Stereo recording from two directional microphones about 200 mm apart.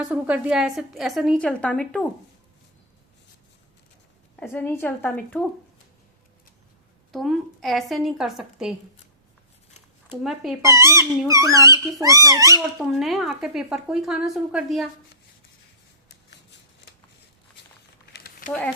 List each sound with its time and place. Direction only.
0.0 s a woman's voice: 5° right (ahead or behind)
4.4 s a woman's voice: 10° left (ahead or behind)
7.1 s a woman's voice: centre (ahead or behind)
10.1 s a woman's voice: centre (ahead or behind)
10.6 s speech: 15° right (ahead or behind)
12.9 s a woman's voice: centre (ahead or behind)
18.1 s a sound: 45° left (ahead or behind)